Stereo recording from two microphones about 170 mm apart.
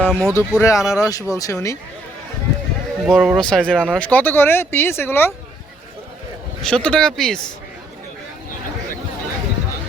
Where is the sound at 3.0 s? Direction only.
Centre (ahead or behind).